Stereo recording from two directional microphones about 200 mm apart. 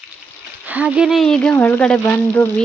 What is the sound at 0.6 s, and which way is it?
Speech, 5° right (ahead or behind).